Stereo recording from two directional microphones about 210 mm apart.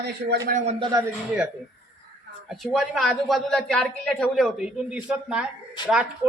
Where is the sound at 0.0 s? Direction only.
50° right (ahead or behind); by 0.9 s 30° right (ahead or behind).